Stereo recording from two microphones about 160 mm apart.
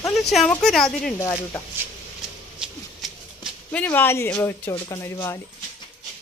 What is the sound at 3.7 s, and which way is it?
Speech, 10° left (ahead or behind).